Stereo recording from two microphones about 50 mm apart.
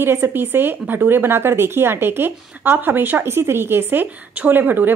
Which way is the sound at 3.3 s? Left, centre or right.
Right.